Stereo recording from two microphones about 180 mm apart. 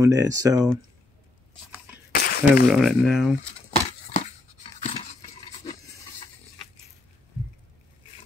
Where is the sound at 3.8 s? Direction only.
35° left (ahead or behind).